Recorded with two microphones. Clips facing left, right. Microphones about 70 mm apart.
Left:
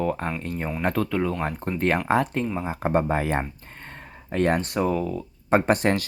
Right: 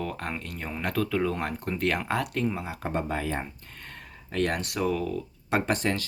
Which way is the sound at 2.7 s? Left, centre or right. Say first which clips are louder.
Left 7 dB; left.